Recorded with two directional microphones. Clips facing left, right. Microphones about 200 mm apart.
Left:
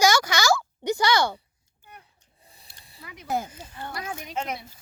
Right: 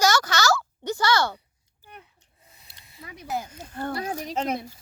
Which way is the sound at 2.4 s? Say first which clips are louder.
Left 1 dB; 35° left (ahead or behind).